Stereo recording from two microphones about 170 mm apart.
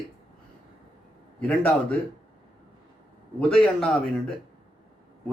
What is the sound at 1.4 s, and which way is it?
Speech, 5° left (ahead or behind).